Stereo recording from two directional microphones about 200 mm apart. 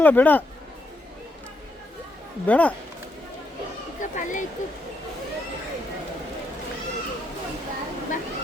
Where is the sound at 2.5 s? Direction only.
5° left (ahead or behind).